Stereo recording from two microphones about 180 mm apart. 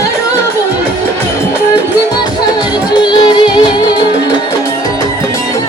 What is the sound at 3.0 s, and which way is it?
Music, 25° left (ahead or behind).